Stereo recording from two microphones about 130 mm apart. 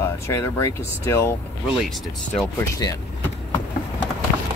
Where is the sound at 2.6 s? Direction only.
30° left (ahead or behind).